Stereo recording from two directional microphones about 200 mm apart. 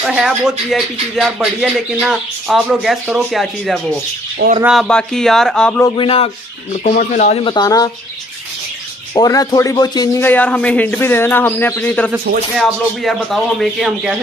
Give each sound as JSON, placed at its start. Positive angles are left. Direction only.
{"t": 0.0, "sound": "speech", "side_deg": -5}
{"t": 5.9, "sound": "speech", "side_deg": 25}
{"t": 9.1, "sound": "a man's voice", "side_deg": 20}